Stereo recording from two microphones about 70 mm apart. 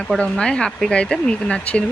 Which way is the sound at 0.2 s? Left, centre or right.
Centre.